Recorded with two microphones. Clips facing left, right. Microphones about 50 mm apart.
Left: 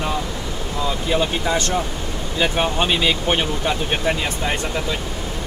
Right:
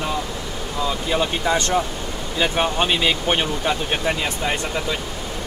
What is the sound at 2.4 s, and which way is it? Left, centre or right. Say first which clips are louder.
Speech: even; centre.